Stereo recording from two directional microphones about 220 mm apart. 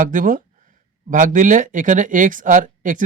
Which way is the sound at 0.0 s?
35° right (ahead or behind).